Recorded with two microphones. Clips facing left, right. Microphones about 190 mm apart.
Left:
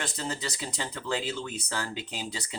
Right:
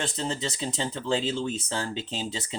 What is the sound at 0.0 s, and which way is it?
Speech, 25° right (ahead or behind).